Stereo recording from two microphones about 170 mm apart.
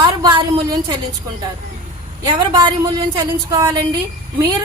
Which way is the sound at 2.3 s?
25° right (ahead or behind).